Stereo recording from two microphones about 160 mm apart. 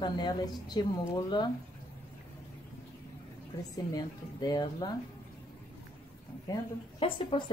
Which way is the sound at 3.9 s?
25° left (ahead or behind).